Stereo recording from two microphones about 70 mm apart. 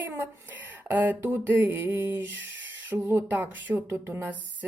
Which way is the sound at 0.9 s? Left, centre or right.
Right.